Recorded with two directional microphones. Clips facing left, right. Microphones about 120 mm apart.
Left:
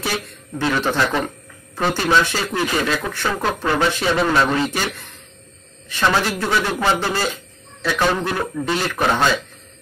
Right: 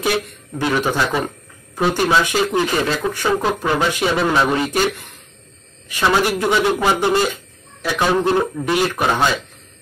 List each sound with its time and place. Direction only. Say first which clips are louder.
0.6 s speech: right 1 dB; 10° right (ahead or behind)